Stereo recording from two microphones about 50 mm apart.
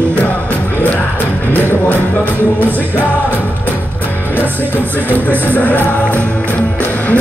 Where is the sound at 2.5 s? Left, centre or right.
Left.